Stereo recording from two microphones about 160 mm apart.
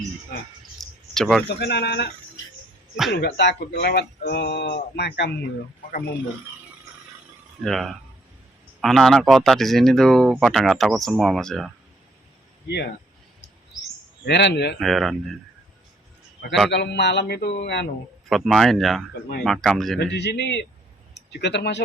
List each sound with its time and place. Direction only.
0.8 s a sound: centre (ahead or behind)
1.5 s speech: 90° left
3.1 s speech: 90° left
7.6 s speech: centre (ahead or behind)
12.6 s speech: 90° left
14.3 s speech: 90° left
14.8 s speech: centre (ahead or behind)
16.7 s speech: 90° left
18.3 s speech: centre (ahead or behind)
20.0 s speech: 90° left